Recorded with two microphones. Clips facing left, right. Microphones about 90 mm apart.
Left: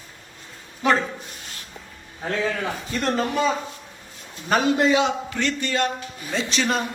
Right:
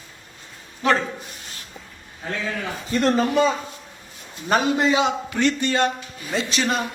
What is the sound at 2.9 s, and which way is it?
A man's voice, 5° right (ahead or behind).